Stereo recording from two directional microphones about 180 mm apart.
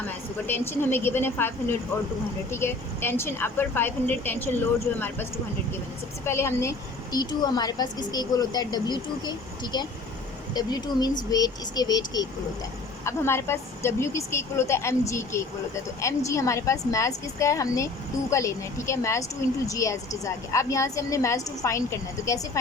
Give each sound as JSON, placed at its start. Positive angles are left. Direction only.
{"t": 0.4, "sound": "a woman's voice", "side_deg": 10}
{"t": 6.2, "sound": "a woman's voice", "side_deg": 15}